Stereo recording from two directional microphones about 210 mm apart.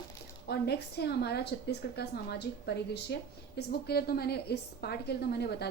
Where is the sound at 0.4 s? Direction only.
50° left (ahead or behind).